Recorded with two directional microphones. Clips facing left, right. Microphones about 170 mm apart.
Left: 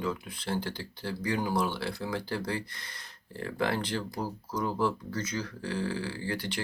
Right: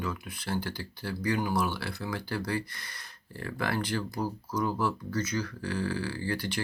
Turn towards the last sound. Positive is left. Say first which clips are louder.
# right 2 dB
turn(degrees=25)  # may be behind; listen again after turning